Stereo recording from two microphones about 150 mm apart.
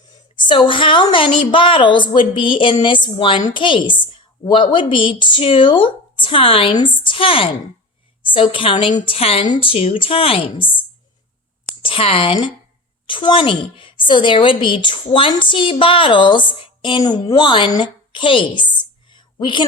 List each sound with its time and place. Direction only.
0.3 s a woman's voice: 30° left (ahead or behind)
11.8 s a woman's voice: 40° left (ahead or behind)